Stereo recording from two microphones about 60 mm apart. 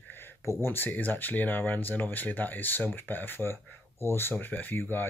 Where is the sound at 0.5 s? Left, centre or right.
Left.